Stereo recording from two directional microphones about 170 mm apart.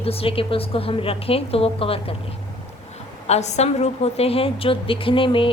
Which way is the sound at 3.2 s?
40° left (ahead or behind).